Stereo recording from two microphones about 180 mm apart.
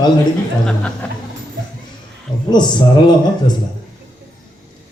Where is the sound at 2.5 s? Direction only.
25° left (ahead or behind).